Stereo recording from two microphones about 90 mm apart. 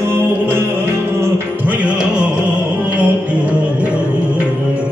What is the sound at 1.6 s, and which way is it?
Music, 15° right (ahead or behind).